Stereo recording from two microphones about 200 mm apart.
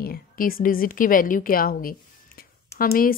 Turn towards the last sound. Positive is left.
turn(degrees=45)  # may be behind; listen again after turning